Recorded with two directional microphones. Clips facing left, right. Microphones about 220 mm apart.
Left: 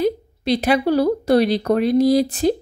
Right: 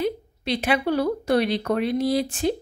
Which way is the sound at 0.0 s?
40° left (ahead or behind).